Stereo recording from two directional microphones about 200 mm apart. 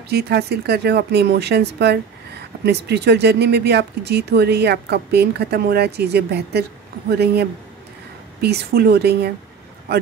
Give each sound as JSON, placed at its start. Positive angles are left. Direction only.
{"t": 0.1, "sound": "speech", "side_deg": -55}